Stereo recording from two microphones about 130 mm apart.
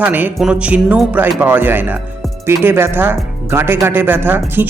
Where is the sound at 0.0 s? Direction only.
15° right (ahead or behind).